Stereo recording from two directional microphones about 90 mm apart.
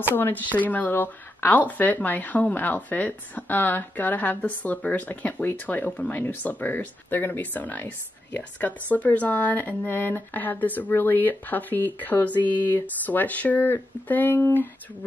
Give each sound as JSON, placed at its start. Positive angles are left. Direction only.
{"t": 0.0, "sound": "speech", "side_deg": 25}